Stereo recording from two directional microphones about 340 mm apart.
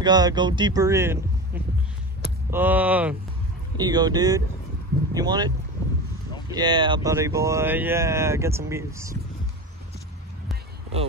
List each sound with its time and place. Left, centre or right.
0.0 s speech: centre
2.5 s speech: centre
6.5 s speech: centre
10.5 s a sound: centre